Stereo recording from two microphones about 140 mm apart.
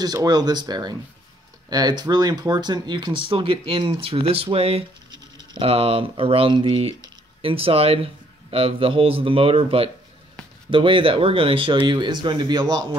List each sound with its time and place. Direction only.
0.0 s speech: 25° right (ahead or behind)